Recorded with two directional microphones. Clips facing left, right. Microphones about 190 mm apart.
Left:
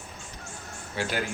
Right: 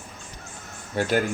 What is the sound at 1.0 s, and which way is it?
Speech, 45° right (ahead or behind).